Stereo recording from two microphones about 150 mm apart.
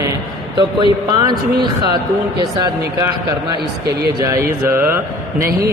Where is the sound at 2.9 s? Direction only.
20° right (ahead or behind).